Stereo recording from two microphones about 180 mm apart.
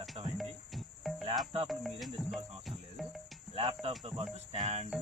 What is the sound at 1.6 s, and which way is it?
Speech, centre (ahead or behind).